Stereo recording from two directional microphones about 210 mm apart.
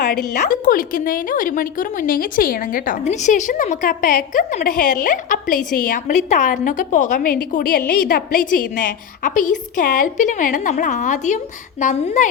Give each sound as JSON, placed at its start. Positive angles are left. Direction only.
{"t": 0.3, "sound": "a woman's voice", "side_deg": 40}